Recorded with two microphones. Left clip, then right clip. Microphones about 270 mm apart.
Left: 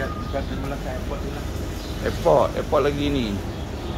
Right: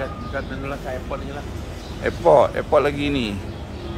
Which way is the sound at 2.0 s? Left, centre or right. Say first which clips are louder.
Right 4 dB; right.